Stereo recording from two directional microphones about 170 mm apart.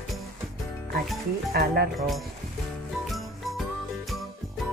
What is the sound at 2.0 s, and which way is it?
Speech, centre (ahead or behind).